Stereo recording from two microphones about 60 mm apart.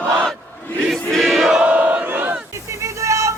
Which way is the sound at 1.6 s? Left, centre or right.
Right.